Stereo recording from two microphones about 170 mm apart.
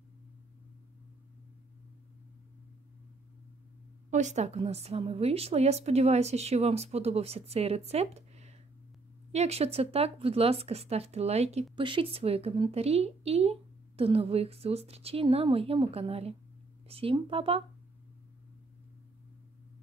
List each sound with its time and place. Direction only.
4.1 s speech: 45° right (ahead or behind)